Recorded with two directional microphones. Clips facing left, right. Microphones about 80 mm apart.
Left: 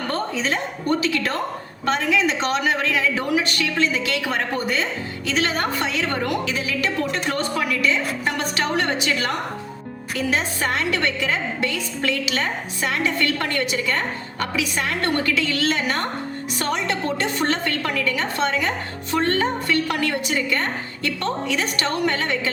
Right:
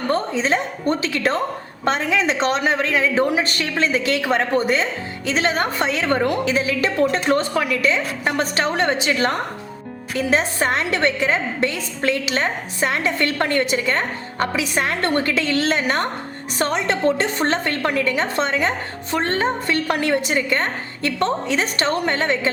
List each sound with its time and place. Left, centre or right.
0.1 s a woman's voice: right